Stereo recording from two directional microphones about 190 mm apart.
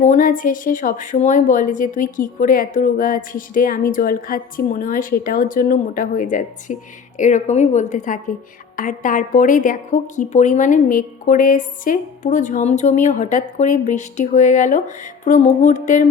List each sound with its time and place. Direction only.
0.0 s a woman's voice: 45° left (ahead or behind)